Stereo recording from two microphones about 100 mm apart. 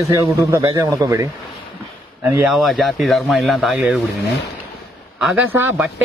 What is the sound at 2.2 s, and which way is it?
Speech, 20° right (ahead or behind).